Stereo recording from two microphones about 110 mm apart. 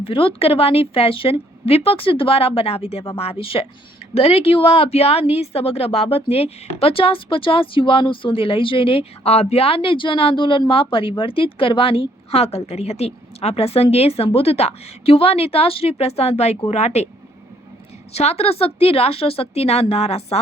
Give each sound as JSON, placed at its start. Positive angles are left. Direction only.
{"t": 0.0, "sound": "speech", "side_deg": 55}
{"t": 18.1, "sound": "speech", "side_deg": 75}